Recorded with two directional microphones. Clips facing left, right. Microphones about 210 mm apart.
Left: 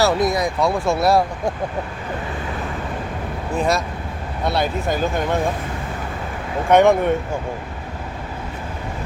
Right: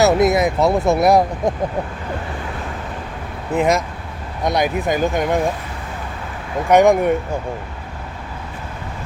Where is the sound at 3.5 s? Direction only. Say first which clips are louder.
Right 4 dB; 20° right (ahead or behind).